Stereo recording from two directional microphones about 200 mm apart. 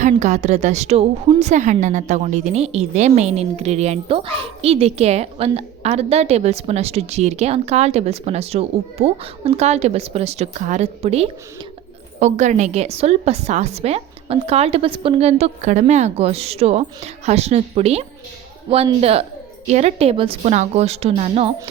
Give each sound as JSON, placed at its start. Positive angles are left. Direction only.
{"t": 0.0, "sound": "a woman's voice", "side_deg": -35}